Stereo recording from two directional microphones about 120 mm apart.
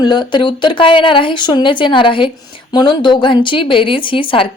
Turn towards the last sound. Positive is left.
turn(degrees=45)  # may be behind; listen again after turning